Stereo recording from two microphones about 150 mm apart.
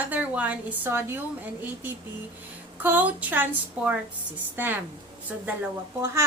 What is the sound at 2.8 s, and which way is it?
A child's voice, 10° right (ahead or behind).